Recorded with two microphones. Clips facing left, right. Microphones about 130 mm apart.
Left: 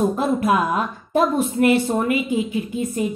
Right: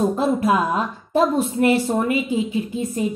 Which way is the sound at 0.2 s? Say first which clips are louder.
Even; 30° right (ahead or behind).